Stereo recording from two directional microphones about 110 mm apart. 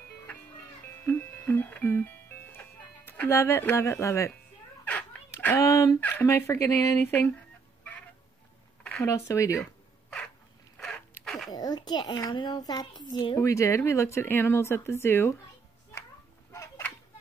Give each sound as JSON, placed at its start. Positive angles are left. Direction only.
{"t": 1.0, "sound": "music", "side_deg": 20}
{"t": 3.1, "sound": "speech", "side_deg": 20}
{"t": 5.3, "sound": "a sound", "side_deg": 15}
{"t": 5.6, "sound": "speech", "side_deg": 30}
{"t": 5.9, "sound": "speech", "side_deg": 20}
{"t": 9.0, "sound": "speech", "side_deg": 25}
{"t": 10.0, "sound": "dog", "side_deg": 5}
{"t": 10.8, "sound": "zipper", "side_deg": 5}
{"t": 11.2, "sound": "a sound", "side_deg": 0}
{"t": 11.5, "sound": "a child's voice", "side_deg": 40}
{"t": 16.5, "sound": "a sound", "side_deg": 25}